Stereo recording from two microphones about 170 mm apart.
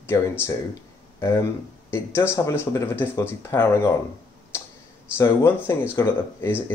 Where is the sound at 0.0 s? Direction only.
15° left (ahead or behind).